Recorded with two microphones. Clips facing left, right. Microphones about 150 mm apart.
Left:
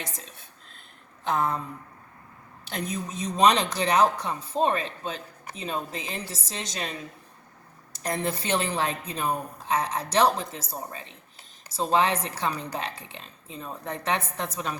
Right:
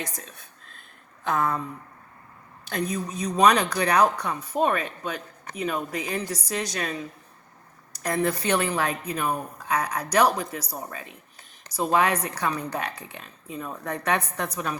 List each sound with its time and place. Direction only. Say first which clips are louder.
0.0 s speech: right 3 dB; 25° left (ahead or behind)
2.6 s speech: right 4 dB; 25° left (ahead or behind)
7.9 s speech: right 4 dB; 25° left (ahead or behind)